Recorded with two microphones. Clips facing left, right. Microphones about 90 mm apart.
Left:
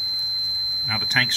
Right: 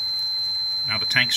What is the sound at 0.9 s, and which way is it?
Speech, 25° left (ahead or behind).